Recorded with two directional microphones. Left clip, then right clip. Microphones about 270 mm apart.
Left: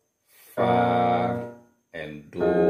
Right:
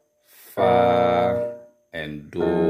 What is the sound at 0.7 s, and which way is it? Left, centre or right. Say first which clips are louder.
Music: right 4 dB; right.